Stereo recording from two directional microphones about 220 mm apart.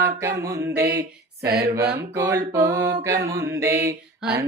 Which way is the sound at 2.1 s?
10° right (ahead or behind).